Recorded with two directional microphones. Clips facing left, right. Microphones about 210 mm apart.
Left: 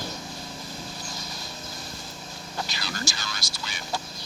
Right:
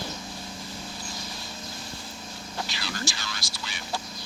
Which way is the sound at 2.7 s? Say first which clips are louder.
Even; 40° left (ahead or behind).